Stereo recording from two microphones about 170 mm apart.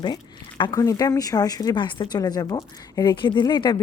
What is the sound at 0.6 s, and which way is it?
A woman's voice, 20° left (ahead or behind).